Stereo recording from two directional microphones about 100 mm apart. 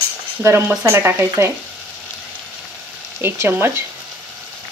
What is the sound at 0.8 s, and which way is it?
Speech, 25° right (ahead or behind).